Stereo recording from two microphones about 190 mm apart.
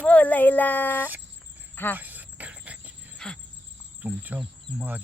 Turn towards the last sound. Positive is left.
turn(degrees=-10)  # may be behind; listen again after turning